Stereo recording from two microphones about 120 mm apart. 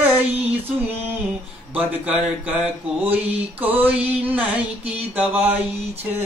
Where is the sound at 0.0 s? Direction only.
15° right (ahead or behind).